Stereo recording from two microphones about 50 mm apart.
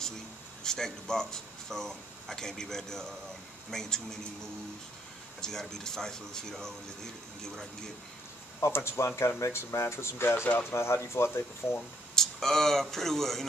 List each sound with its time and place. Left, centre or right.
0.7 s speech: centre
5.4 s speech: centre
8.7 s speech: left
12.2 s speech: centre